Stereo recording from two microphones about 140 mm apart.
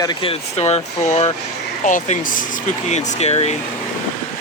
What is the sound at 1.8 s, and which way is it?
Speech, 65° left (ahead or behind).